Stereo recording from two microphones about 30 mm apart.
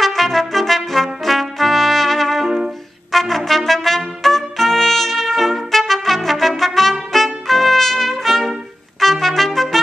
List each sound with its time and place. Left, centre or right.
0.0 s trumpet: centre